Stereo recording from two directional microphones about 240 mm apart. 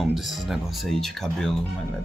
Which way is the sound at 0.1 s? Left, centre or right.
Centre.